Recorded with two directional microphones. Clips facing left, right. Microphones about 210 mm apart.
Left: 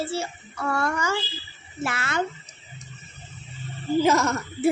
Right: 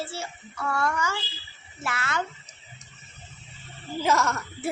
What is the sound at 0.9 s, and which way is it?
Child singing, 35° left (ahead or behind).